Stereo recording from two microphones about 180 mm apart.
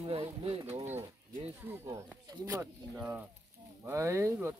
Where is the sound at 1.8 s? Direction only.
15° right (ahead or behind).